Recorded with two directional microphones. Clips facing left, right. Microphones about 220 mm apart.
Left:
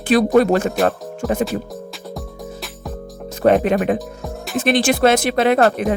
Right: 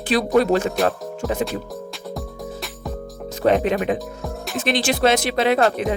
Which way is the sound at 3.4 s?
50° left (ahead or behind).